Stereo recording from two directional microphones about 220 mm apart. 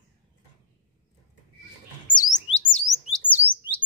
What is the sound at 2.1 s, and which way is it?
Chirp, 35° left (ahead or behind).